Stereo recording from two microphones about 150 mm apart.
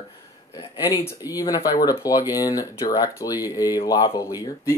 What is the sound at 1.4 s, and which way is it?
Speech, 25° left (ahead or behind).